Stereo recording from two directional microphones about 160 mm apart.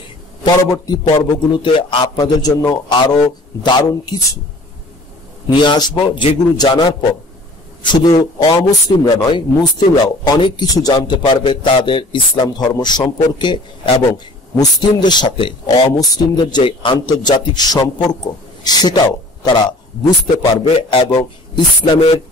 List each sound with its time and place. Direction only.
0.4 s a man's voice: 25° left (ahead or behind)
5.5 s a man's voice: 30° left (ahead or behind)